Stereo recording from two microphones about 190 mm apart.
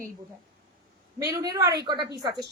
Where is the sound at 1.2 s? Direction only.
20° right (ahead or behind).